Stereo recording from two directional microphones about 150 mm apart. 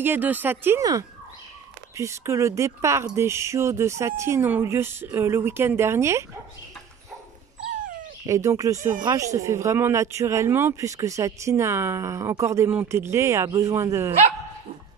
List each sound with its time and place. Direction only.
0.0 s speech: 10° right (ahead or behind)
8.3 s speech: 20° right (ahead or behind)